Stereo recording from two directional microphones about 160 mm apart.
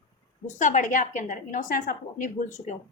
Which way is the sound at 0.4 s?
50° left (ahead or behind).